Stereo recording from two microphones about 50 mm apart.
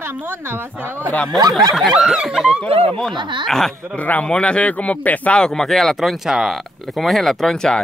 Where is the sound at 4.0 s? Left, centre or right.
Left.